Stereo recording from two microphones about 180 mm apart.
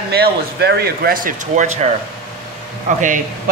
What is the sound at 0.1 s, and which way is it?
Speech, 65° right (ahead or behind).